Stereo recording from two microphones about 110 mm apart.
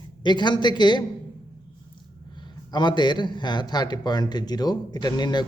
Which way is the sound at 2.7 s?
45° left (ahead or behind).